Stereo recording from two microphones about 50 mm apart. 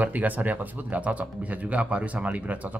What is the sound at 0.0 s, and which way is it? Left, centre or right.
Speech, right.